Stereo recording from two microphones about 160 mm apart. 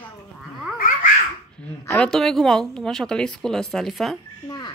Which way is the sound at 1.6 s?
15° left (ahead or behind).